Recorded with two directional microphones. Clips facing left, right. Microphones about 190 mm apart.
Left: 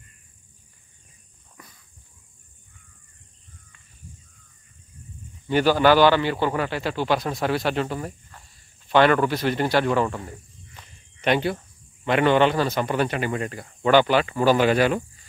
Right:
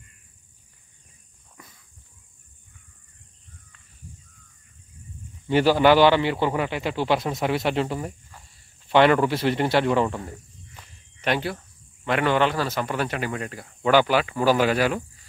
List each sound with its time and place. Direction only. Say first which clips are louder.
5.5 s speech: even; 25° right (ahead or behind)
10.8 s speech: left 3 dB; centre (ahead or behind)